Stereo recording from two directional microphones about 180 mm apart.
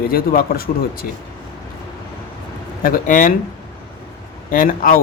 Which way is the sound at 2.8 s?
50° left (ahead or behind).